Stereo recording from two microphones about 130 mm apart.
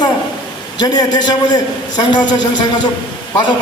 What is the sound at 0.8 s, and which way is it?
A man's voice, 35° left (ahead or behind).